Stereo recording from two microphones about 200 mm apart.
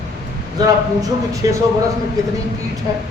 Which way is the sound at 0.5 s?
15° right (ahead or behind).